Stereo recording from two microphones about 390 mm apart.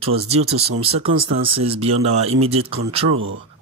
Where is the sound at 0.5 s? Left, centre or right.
Right.